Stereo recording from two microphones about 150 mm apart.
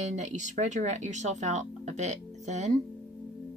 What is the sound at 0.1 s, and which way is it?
Speech, 50° right (ahead or behind).